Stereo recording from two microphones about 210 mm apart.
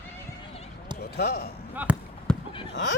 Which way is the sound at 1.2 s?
50° left (ahead or behind).